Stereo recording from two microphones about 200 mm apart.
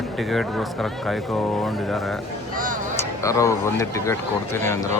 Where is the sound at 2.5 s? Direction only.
40° right (ahead or behind).